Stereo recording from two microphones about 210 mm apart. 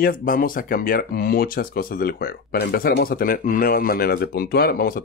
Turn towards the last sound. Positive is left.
turn(degrees=45)  # may be behind; listen again after turning